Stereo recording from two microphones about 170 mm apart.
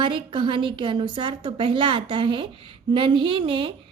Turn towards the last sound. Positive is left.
turn(degrees=-30)  # may be behind; listen again after turning